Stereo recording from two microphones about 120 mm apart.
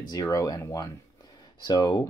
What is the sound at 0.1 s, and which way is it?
Speech, 30° left (ahead or behind).